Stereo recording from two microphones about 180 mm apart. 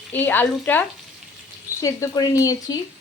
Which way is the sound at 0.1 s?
10° left (ahead or behind).